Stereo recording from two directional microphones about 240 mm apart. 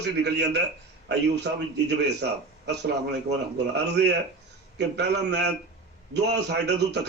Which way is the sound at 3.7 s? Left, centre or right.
Right.